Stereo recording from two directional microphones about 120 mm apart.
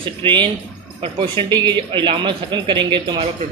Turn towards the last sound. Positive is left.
turn(degrees=-40)  # may be behind; listen again after turning